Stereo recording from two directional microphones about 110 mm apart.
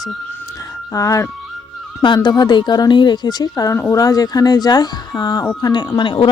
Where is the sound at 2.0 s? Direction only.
40° left (ahead or behind).